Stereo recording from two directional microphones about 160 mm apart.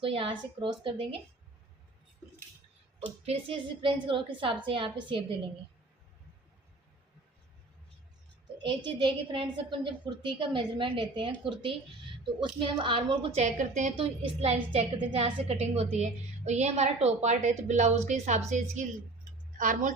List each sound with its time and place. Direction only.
0.0 s a woman's voice: 35° right (ahead or behind)
3.2 s a woman's voice: 35° right (ahead or behind)
8.6 s a woman's voice: 30° right (ahead or behind)
12.5 s a woman's voice: 30° right (ahead or behind); by 13.9 s 50° right (ahead or behind)
13.9 s a woman's voice: 40° right (ahead or behind); by 19.9 s 55° right (ahead or behind)